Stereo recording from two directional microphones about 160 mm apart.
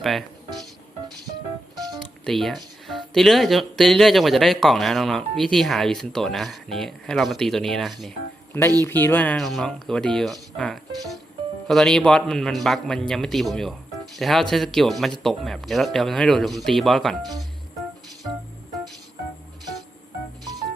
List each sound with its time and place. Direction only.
0.0 s speech: centre (ahead or behind)
2.0 s speech: centre (ahead or behind)
8.8 s speech: 15° left (ahead or behind)